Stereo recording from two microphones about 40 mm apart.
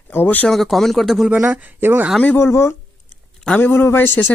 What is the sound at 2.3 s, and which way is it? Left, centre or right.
Speech, left.